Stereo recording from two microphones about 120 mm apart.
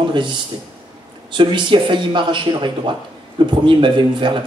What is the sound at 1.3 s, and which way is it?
Speech, 40° right (ahead or behind).